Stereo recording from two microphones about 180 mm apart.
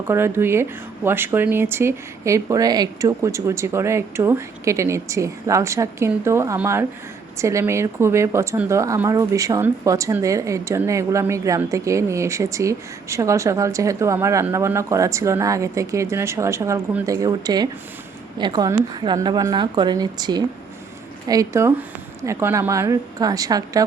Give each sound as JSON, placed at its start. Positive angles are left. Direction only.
{"t": 0.1, "sound": "a woman's voice", "side_deg": -15}